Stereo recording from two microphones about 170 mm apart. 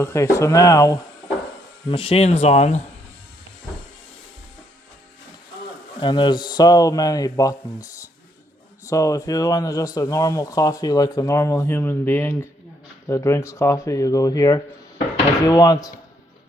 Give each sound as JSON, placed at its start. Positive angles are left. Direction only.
{"t": 0.0, "sound": "speech", "side_deg": 15}
{"t": 1.9, "sound": "speech", "side_deg": 35}
{"t": 6.0, "sound": "speech", "side_deg": 25}
{"t": 8.8, "sound": "speech", "side_deg": 20}